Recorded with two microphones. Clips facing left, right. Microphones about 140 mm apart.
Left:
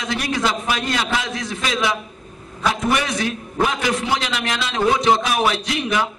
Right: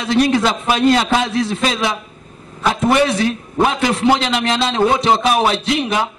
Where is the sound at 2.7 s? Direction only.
30° right (ahead or behind).